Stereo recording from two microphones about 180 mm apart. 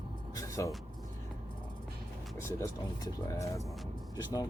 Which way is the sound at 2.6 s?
20° left (ahead or behind).